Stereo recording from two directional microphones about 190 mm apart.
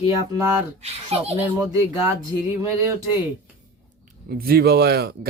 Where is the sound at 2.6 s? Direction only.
15° right (ahead or behind).